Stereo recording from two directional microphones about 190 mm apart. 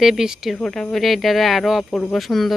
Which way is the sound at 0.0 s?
Centre (ahead or behind).